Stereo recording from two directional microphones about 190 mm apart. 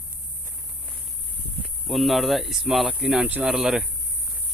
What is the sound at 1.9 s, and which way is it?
Speech, centre (ahead or behind).